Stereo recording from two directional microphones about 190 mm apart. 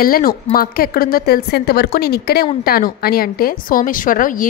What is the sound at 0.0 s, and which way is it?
A woman's voice, 50° left (ahead or behind).